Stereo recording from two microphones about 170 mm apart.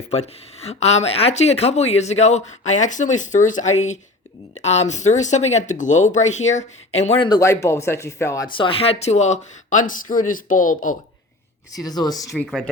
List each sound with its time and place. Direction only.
0.1 s speech: 40° left (ahead or behind)
7.3 s speech: 20° left (ahead or behind)
8.4 s speech: 30° left (ahead or behind); by 10.9 s 50° left (ahead or behind)
11.7 s speech: 20° left (ahead or behind)
12.3 s speech: centre (ahead or behind)